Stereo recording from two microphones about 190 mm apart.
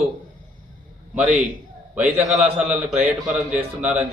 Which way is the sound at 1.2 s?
10° right (ahead or behind).